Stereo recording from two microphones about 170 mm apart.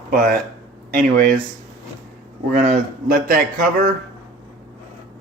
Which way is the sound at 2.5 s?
55° right (ahead or behind).